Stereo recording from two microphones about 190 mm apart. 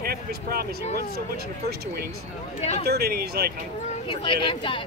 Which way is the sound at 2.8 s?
55° right (ahead or behind).